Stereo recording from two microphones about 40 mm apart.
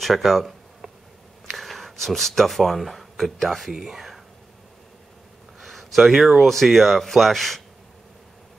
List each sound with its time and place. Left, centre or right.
0.0 s speech: centre
5.6 s speech: centre